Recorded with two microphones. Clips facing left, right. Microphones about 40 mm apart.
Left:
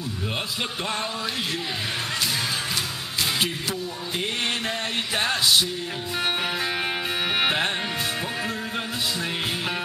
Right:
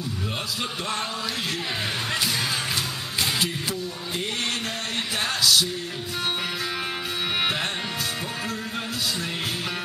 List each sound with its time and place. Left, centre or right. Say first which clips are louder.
5.2 s music: even; left
7.3 s music: left 3 dB; left